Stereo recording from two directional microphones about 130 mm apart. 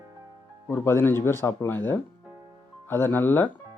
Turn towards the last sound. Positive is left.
turn(degrees=15)  # may be behind; listen again after turning